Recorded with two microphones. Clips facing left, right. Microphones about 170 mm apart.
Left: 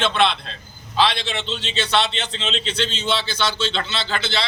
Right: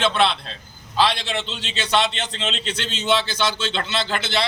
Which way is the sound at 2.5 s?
50° right (ahead or behind).